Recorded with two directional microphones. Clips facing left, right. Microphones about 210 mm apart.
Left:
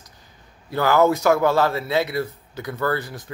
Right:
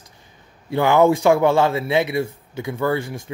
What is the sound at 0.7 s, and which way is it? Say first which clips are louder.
Speech: right 2 dB; 25° right (ahead or behind).